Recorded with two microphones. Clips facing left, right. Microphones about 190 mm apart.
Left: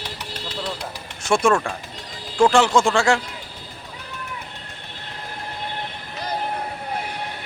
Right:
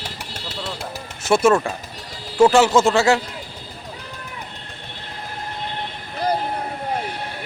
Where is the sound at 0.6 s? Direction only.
5° right (ahead or behind).